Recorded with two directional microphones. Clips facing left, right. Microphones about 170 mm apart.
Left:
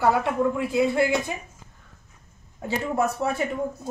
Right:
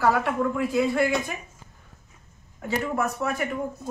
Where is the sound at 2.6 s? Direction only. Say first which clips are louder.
Left 2 dB; 30° left (ahead or behind).